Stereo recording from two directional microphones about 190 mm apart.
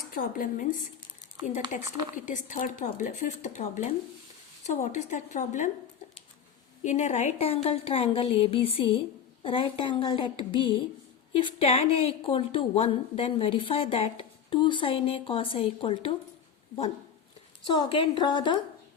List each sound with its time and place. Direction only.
0.0 s speech: 50° left (ahead or behind)
2.2 s a woman's voice: 40° left (ahead or behind)
6.8 s a woman's voice: 40° left (ahead or behind)
17.7 s a woman's voice: 25° left (ahead or behind)